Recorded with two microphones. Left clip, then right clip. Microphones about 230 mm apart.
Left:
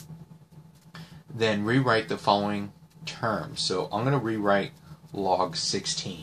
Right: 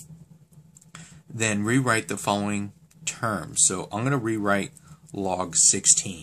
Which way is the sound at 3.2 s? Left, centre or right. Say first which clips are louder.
Right 2 dB; right.